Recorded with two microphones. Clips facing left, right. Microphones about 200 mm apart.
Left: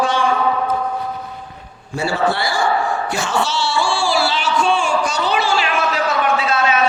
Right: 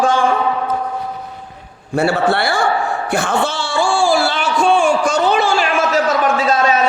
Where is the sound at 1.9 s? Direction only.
60° right (ahead or behind).